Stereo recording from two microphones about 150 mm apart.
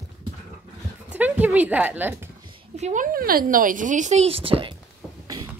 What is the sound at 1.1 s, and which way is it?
Speech, 10° right (ahead or behind).